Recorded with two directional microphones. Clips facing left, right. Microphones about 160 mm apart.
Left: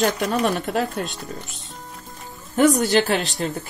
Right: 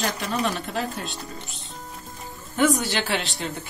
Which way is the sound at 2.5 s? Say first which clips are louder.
Left 5 dB; 40° left (ahead or behind).